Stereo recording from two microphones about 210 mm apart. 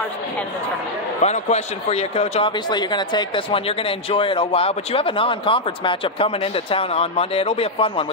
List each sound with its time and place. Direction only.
1.2 s speech: 30° left (ahead or behind)